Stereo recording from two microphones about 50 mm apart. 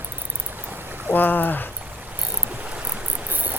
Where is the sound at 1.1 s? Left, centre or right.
Left.